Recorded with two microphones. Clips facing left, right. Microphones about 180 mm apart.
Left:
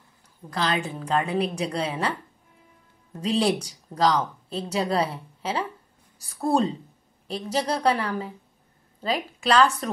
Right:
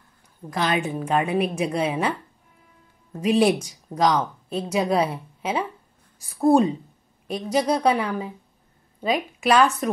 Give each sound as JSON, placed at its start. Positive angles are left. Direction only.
{"t": 0.5, "sound": "a woman's voice", "side_deg": -20}